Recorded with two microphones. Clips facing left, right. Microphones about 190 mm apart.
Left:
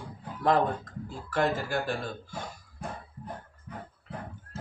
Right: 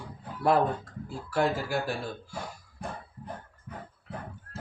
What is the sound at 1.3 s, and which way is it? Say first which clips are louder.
A man's voice: even; 10° right (ahead or behind).